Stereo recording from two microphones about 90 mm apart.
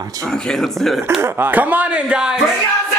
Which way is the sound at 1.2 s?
20° right (ahead or behind).